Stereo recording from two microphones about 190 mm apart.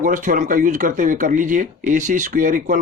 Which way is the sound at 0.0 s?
45° right (ahead or behind).